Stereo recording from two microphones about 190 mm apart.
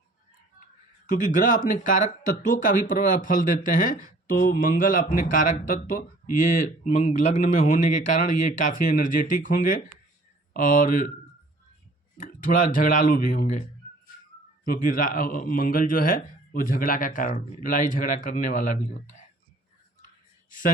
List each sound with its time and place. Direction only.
1.0 s speech: 45° left (ahead or behind)
12.2 s speech: 45° left (ahead or behind)
20.5 s speech: 45° left (ahead or behind)